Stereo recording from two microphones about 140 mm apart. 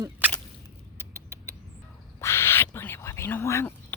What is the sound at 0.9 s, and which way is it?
Rodents, 20° right (ahead or behind).